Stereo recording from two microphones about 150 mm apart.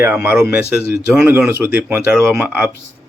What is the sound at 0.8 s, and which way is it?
Speech, 90° left.